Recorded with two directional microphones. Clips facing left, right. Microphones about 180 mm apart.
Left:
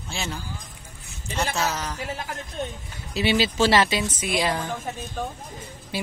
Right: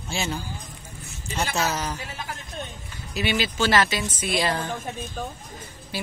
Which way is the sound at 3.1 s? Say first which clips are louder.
Left 3 dB; 30° left (ahead or behind).